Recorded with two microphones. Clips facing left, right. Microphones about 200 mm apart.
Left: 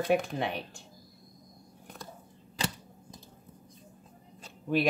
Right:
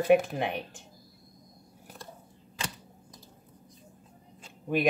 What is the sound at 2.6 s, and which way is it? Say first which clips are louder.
Typewriter: left 4 dB; 35° left (ahead or behind).